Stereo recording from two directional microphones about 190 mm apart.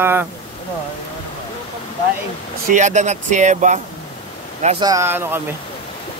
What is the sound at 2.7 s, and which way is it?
A man's voice, 40° right (ahead or behind).